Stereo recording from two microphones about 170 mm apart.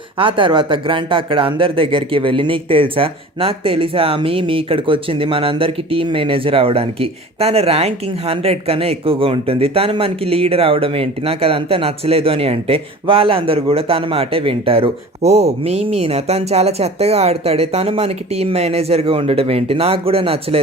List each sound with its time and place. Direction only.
0.2 s speech: 30° right (ahead or behind)